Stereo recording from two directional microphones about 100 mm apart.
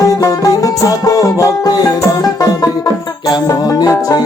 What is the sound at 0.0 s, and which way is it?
Music, 35° left (ahead or behind).